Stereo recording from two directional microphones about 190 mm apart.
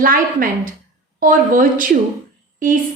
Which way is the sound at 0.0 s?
50° right (ahead or behind).